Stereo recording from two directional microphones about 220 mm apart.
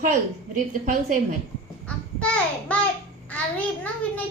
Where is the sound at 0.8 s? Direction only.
35° right (ahead or behind).